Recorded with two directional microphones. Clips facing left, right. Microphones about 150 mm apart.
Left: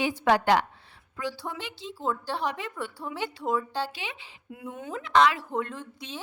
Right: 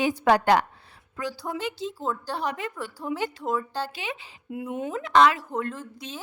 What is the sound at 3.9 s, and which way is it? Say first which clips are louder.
Speech: right 4 dB; 45° right (ahead or behind).